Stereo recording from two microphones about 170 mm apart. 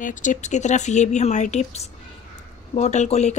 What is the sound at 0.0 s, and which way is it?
A woman's voice, 50° left (ahead or behind).